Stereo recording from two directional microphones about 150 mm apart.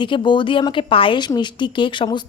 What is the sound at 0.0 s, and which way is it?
A woman's voice, 30° left (ahead or behind).